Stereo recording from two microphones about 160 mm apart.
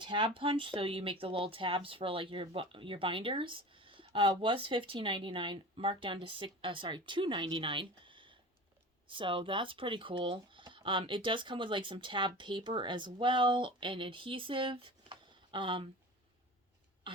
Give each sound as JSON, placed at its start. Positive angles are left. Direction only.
{"t": 0.0, "sound": "speech", "side_deg": -30}